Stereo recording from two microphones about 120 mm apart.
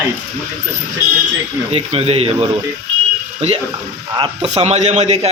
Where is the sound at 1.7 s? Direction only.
55° right (ahead or behind).